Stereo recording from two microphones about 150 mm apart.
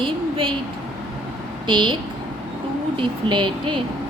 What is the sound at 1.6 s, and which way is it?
A woman's voice, 30° right (ahead or behind).